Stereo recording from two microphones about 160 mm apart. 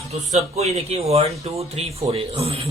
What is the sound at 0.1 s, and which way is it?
Speech, 40° right (ahead or behind).